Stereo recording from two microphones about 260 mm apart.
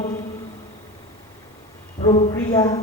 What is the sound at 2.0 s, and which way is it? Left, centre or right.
Speech, left.